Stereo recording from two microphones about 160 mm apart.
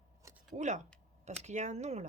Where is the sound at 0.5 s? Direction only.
45° right (ahead or behind).